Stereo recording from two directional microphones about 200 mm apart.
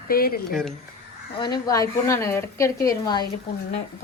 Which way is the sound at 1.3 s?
20° left (ahead or behind).